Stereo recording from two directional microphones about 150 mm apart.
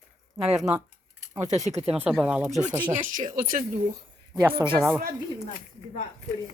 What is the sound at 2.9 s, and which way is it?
Speech, 60° right (ahead or behind).